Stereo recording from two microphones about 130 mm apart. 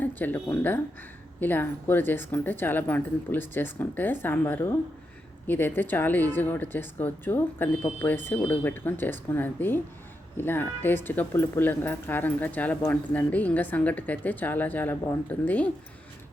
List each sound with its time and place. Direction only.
0.0 s speech: 15° left (ahead or behind)